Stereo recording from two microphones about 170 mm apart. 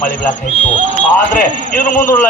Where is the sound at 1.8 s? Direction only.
50° left (ahead or behind).